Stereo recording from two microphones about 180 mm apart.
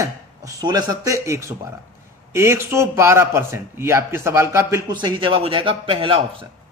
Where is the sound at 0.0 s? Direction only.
20° right (ahead or behind).